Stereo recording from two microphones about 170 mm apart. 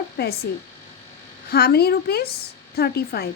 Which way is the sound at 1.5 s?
65° left (ahead or behind).